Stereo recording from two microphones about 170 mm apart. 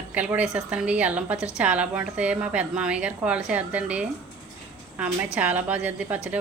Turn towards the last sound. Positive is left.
turn(degrees=-10)  # may be behind; listen again after turning